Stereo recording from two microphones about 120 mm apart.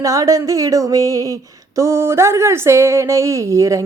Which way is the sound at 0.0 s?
30° right (ahead or behind).